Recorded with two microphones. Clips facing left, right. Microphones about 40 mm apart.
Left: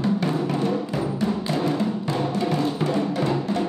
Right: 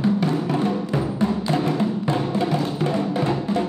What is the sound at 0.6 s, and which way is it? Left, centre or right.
Music, right.